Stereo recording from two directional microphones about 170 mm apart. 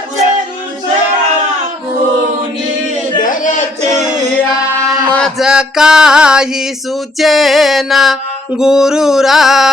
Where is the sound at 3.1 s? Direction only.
50° left (ahead or behind).